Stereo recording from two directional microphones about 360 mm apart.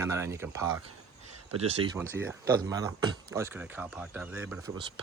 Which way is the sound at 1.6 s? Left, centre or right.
Centre.